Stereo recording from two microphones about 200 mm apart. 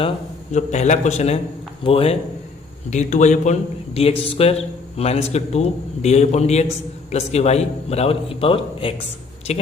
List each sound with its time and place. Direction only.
0.5 s a man's voice: 35° left (ahead or behind)